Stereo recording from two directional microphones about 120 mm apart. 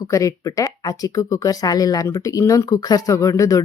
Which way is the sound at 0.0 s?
25° left (ahead or behind).